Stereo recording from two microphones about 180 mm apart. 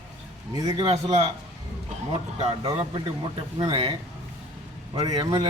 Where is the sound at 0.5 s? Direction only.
20° right (ahead or behind).